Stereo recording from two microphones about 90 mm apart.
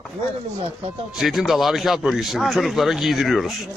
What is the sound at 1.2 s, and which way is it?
Speech, centre (ahead or behind).